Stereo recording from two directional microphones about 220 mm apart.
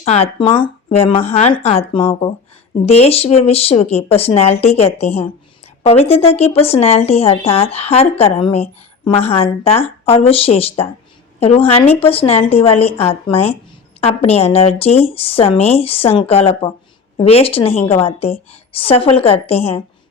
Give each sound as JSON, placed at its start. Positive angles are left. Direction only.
{"t": 0.0, "sound": "speech", "side_deg": 30}